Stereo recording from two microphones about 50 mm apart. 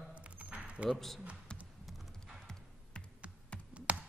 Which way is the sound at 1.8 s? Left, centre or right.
Centre.